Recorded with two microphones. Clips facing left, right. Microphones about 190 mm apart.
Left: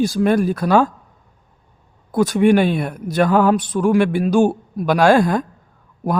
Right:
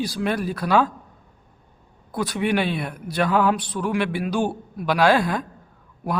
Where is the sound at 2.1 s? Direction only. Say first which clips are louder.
Left 9 dB; 45° left (ahead or behind).